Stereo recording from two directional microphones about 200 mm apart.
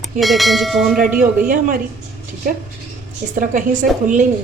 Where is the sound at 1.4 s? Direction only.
40° right (ahead or behind).